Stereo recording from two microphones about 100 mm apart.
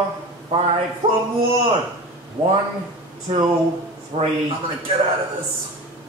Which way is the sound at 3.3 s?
55° right (ahead or behind).